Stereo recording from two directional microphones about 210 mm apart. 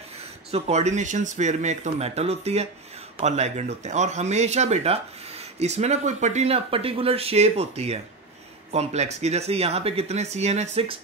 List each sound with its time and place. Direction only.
0.5 s speech: 30° right (ahead or behind)